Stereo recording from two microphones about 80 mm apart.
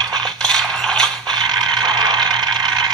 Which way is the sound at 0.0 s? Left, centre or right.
Right.